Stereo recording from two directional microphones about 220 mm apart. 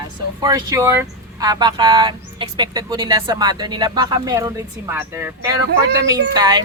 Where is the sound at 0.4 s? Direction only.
15° right (ahead or behind).